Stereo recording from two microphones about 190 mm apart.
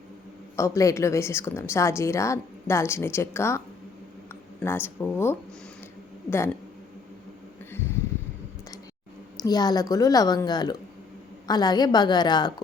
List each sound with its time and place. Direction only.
0.5 s a woman's voice: 15° left (ahead or behind)
4.6 s a woman's voice: 10° left (ahead or behind)
7.7 s a sound: 15° left (ahead or behind)
9.4 s a woman's voice: 20° left (ahead or behind)